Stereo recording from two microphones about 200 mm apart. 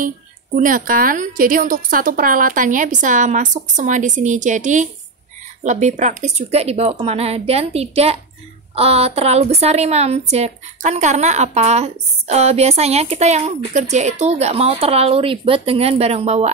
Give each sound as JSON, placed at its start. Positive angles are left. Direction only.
{"t": 0.6, "sound": "a woman's voice", "side_deg": -45}